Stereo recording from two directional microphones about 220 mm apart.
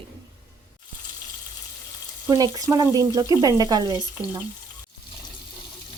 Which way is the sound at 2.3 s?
15° right (ahead or behind).